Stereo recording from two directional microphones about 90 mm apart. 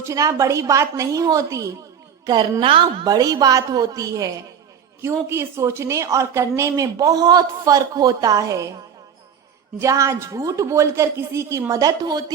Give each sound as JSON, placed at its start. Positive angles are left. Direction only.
{"t": 0.0, "sound": "a woman's voice", "side_deg": -40}
{"t": 2.2, "sound": "a woman's voice", "side_deg": -55}
{"t": 2.6, "sound": "a woman's voice", "side_deg": -70}
{"t": 3.1, "sound": "a woman's voice", "side_deg": -45}
{"t": 5.0, "sound": "a woman's voice", "side_deg": -30}
{"t": 9.7, "sound": "a woman's voice", "side_deg": -35}